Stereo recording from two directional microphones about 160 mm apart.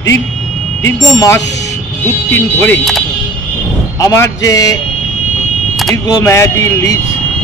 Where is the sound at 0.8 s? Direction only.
20° left (ahead or behind).